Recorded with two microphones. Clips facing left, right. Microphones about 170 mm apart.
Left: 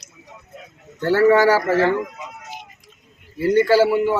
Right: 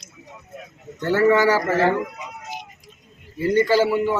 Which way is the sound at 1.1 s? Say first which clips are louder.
Left 2 dB; 10° left (ahead or behind).